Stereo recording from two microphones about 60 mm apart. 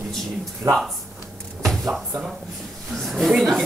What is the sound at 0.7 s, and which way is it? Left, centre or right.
Speech, right.